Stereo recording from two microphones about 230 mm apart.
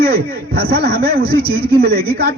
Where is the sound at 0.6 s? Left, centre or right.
Right.